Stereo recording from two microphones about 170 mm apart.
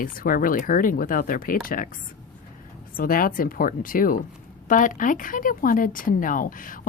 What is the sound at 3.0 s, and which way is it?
A woman's voice, 55° left (ahead or behind).